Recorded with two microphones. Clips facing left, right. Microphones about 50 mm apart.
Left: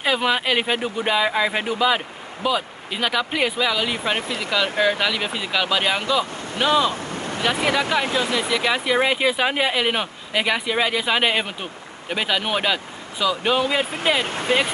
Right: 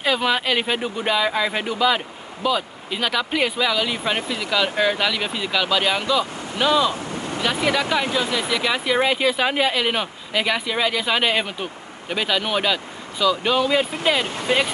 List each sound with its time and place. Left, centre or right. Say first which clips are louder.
0.0 s speech: even; centre
6.6 s speech: even; left
6.9 s wind noise: even; left
7.9 s speech: even; centre
14.2 s speech: left 1 dB; left